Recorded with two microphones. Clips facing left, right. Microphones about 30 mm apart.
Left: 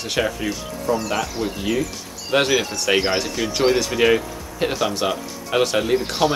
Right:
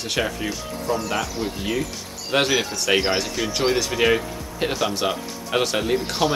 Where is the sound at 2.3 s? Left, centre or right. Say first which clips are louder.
Left 2 dB; centre.